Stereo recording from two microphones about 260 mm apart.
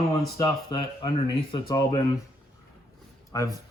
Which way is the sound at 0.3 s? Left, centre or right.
Centre.